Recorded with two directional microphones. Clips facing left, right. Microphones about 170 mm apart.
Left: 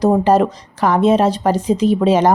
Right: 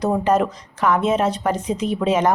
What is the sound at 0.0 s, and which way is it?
Speech, 35° left (ahead or behind).